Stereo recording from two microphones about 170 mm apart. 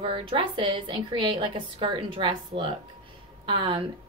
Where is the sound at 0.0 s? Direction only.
30° right (ahead or behind).